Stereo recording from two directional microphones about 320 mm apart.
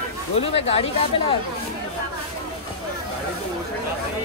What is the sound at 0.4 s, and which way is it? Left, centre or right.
Speech, centre.